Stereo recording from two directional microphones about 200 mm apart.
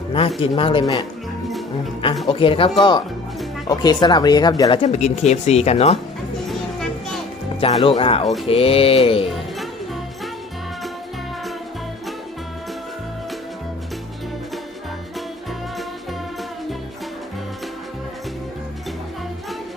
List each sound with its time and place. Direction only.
0.3 s speech: 25° left (ahead or behind)
2.2 s speech: 25° left (ahead or behind)
4.8 s speech: 35° left (ahead or behind)
6.5 s music: centre (ahead or behind)
7.6 s speech: 30° left (ahead or behind)
9.3 s music: centre (ahead or behind)